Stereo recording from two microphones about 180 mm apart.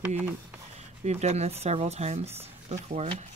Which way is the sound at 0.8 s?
35° right (ahead or behind).